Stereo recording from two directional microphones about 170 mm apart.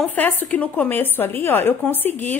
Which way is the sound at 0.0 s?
10° left (ahead or behind).